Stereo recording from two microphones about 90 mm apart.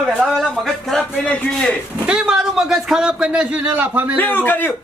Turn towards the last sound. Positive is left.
turn(degrees=20)  # may be behind; listen again after turning